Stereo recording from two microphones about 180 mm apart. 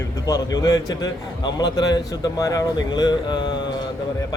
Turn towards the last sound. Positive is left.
turn(degrees=25)  # may be behind; listen again after turning